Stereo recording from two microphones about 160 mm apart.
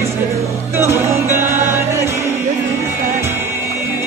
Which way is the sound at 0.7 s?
15° right (ahead or behind).